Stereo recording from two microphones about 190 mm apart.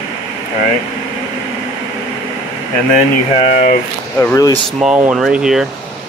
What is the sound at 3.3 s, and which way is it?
Speech, 30° left (ahead or behind).